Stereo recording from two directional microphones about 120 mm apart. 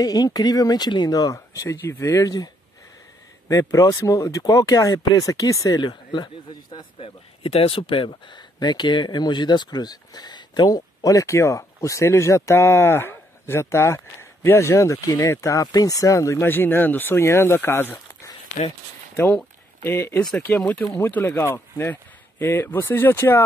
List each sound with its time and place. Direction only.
0.0 s speech: 30° left (ahead or behind)
7.0 s speech: 55° left (ahead or behind); by 17.9 s 15° left (ahead or behind)
19.8 s speech: 20° left (ahead or behind)
20.2 s speech: 10° left (ahead or behind)